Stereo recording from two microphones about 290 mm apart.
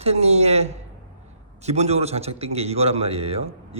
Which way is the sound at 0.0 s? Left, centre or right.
Right.